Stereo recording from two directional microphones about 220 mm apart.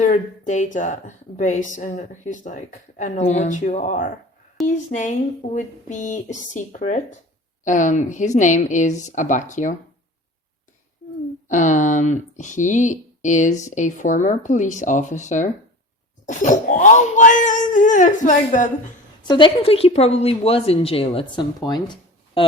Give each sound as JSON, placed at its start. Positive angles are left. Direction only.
{"t": 0.0, "sound": "a woman's voice", "side_deg": 35}
{"t": 11.0, "sound": "a sound", "side_deg": 45}
{"t": 11.4, "sound": "a woman's voice", "side_deg": 35}
{"t": 19.3, "sound": "a woman's voice", "side_deg": 25}